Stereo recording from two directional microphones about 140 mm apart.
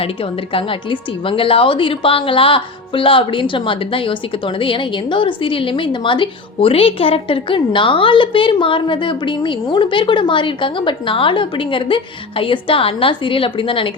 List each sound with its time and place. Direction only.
0.0 s a woman's voice: 40° left (ahead or behind)